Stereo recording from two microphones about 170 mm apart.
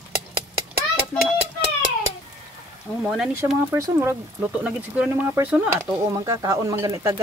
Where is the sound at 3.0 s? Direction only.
5° right (ahead or behind).